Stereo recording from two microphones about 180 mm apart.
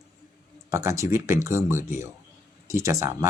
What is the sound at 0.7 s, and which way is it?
Speech, 15° right (ahead or behind).